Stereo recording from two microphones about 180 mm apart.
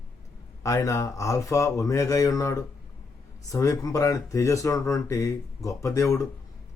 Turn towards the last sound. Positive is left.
turn(degrees=15)  # may be behind; listen again after turning